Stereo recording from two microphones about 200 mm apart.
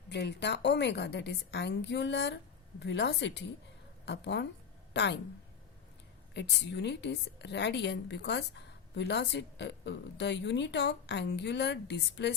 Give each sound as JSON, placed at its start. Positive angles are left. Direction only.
{"t": 0.1, "sound": "a woman's voice", "side_deg": 60}
{"t": 6.3, "sound": "a woman's voice", "side_deg": 60}